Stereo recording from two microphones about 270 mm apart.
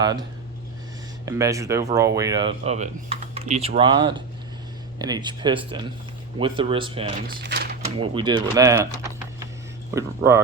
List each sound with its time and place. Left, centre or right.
1.2 s speech: centre
7.4 s a sound: right
7.9 s speech: centre